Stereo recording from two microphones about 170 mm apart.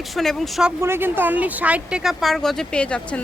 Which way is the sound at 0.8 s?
15° right (ahead or behind).